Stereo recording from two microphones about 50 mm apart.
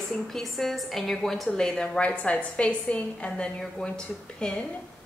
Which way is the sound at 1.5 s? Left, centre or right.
Centre.